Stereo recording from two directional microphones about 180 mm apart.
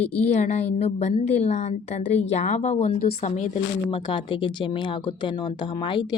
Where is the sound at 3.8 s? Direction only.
25° left (ahead or behind).